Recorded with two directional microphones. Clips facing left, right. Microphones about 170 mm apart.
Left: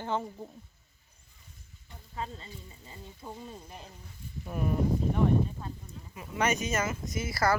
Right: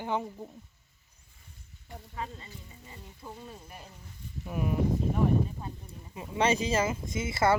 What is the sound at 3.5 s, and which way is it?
Speech, 25° left (ahead or behind).